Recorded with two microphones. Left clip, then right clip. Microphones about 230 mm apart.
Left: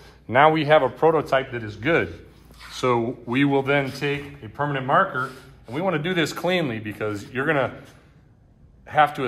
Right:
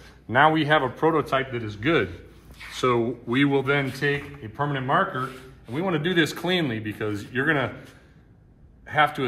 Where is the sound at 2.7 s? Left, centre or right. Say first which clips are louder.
Left 1 dB; left.